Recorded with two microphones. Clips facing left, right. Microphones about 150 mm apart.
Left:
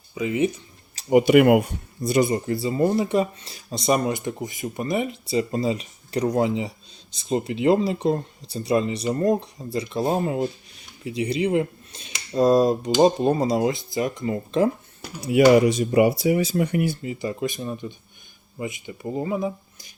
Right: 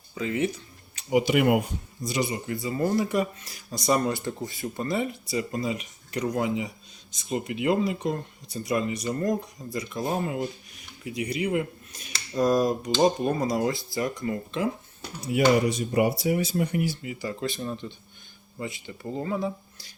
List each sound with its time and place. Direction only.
0.1 s speech: 15° left (ahead or behind)
1.1 s speech: 60° left (ahead or behind)
2.0 s speech: 50° left (ahead or behind)
2.6 s speech: 25° left (ahead or behind)
15.2 s speech: 90° left; by 17.0 s 65° left (ahead or behind)
17.0 s speech: 25° left (ahead or behind)